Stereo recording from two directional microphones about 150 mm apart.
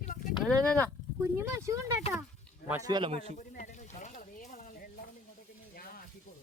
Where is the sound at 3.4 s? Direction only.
55° left (ahead or behind).